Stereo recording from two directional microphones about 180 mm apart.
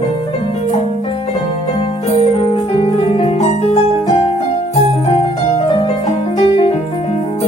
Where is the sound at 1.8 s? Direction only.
35° left (ahead or behind).